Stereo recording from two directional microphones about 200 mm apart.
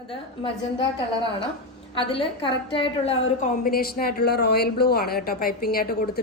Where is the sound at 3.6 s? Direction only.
50° left (ahead or behind).